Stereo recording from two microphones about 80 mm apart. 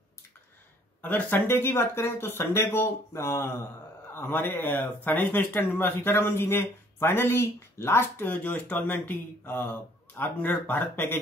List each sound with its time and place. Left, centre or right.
1.0 s speech: left